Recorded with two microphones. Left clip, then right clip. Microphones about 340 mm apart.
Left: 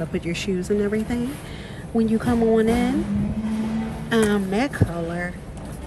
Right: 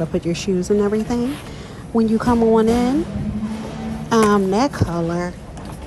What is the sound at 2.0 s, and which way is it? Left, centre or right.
Speech, left.